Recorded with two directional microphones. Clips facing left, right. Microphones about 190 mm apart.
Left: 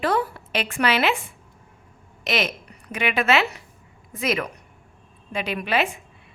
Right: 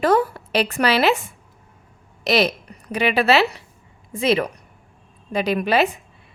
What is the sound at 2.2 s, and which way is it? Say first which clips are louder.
A woman's voice: right 6 dB; 35° right (ahead or behind).